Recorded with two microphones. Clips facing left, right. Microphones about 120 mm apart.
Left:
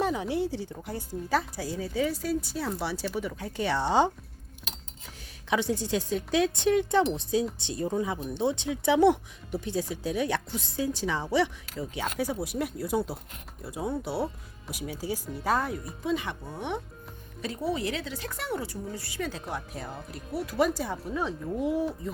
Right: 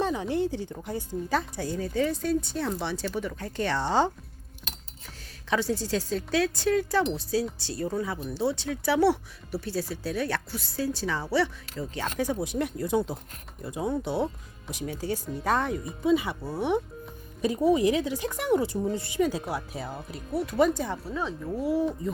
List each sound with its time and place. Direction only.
0.0 s a woman's voice: 5° left (ahead or behind)
4.6 s cutlery: centre (ahead or behind)
5.5 s a woman's voice: 15° left (ahead or behind)
21.2 s speech: 15° left (ahead or behind)